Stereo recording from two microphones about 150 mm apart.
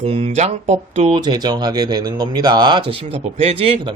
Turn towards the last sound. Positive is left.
turn(degrees=-40)  # may be behind; listen again after turning